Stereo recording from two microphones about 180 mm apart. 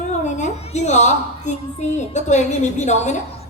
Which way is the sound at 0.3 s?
40° left (ahead or behind).